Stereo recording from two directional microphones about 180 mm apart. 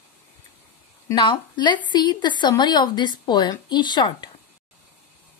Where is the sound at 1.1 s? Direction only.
25° left (ahead or behind).